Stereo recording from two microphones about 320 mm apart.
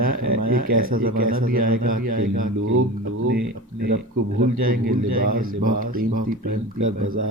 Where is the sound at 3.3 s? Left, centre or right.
Right.